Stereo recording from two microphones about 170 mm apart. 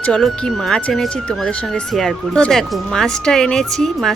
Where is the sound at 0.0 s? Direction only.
Centre (ahead or behind).